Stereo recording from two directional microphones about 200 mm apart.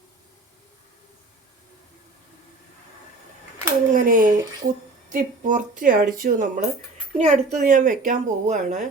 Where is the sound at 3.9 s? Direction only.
45° right (ahead or behind).